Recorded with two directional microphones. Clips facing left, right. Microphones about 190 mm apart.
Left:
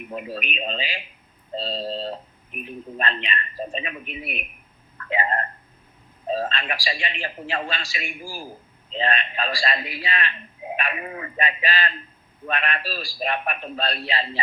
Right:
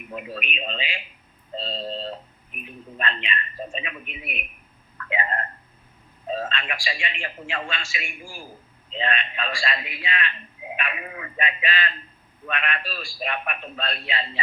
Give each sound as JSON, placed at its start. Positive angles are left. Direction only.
{"t": 0.1, "sound": "speech", "side_deg": 35}